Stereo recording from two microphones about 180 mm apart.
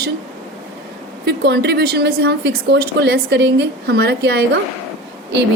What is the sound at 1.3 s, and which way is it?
A woman's voice, 65° right (ahead or behind).